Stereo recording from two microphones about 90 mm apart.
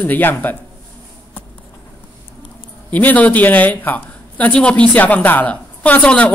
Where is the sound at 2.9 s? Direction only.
20° left (ahead or behind).